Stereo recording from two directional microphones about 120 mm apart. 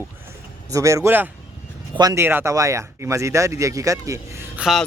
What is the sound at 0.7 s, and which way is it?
Speech, 25° right (ahead or behind).